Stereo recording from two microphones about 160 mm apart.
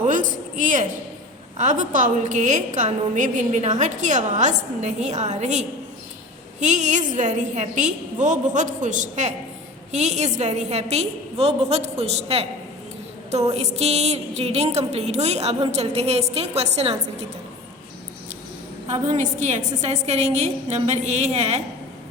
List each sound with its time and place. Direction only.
0.0 s a sound: 50° right (ahead or behind)
1.5 s a woman's voice: 50° right (ahead or behind)
13.5 s a woman's voice: 40° right (ahead or behind)
18.9 s a woman's voice: 45° right (ahead or behind)